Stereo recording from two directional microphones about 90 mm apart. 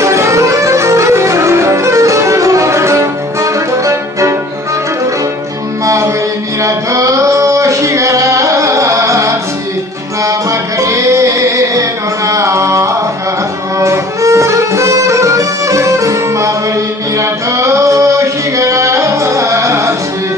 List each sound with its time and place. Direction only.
0.0 s music: 35° right (ahead or behind)
5.9 s music: 35° right (ahead or behind)
10.8 s music: 35° right (ahead or behind)
12.3 s carnatic music: 35° right (ahead or behind)
13.7 s music: 35° right (ahead or behind)
17.2 s a sound: 35° right (ahead or behind)